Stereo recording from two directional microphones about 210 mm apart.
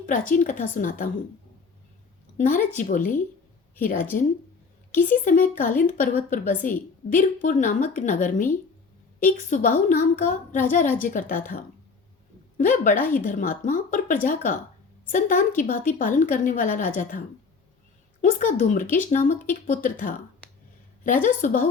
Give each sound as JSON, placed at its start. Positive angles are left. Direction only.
{"t": 0.0, "sound": "a woman's voice", "side_deg": 35}
{"t": 2.4, "sound": "a woman's voice", "side_deg": 35}
{"t": 4.1, "sound": "a woman's voice", "side_deg": 40}
{"t": 21.2, "sound": "a woman's voice", "side_deg": 40}